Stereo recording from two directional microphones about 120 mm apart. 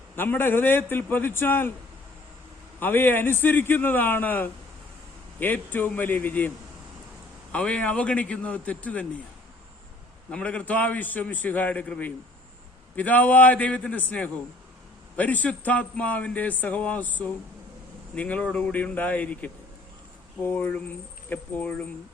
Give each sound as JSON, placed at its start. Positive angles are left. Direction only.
{"t": 0.2, "sound": "a man's voice", "side_deg": 15}
{"t": 2.8, "sound": "a man's voice", "side_deg": 15}
{"t": 7.5, "sound": "a man's voice", "side_deg": 10}
{"t": 10.2, "sound": "a man's voice", "side_deg": 10}